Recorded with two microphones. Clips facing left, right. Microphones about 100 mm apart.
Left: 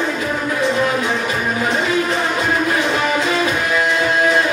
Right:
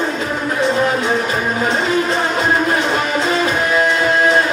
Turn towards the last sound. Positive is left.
turn(degrees=-35)  # may be behind; listen again after turning